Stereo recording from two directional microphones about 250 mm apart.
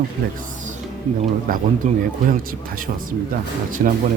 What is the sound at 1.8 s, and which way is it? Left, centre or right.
Speech, right.